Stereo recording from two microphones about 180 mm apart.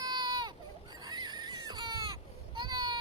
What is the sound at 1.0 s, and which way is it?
Baby cry, 20° right (ahead or behind).